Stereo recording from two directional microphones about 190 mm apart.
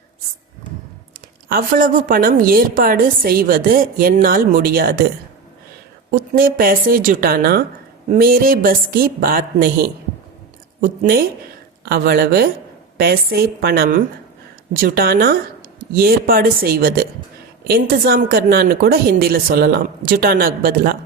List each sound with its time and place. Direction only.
1.5 s a woman's voice: 50° right (ahead or behind)
6.1 s a woman's voice: 50° right (ahead or behind)